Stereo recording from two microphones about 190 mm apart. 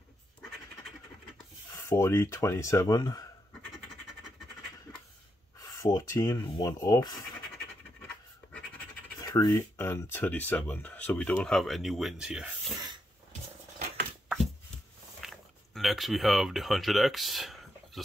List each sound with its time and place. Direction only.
1.8 s speech: 15° left (ahead or behind)
5.6 s speech: 20° left (ahead or behind)
9.2 s speech: 20° left (ahead or behind); by 12.7 s 5° right (ahead or behind)
15.1 s a sound: centre (ahead or behind)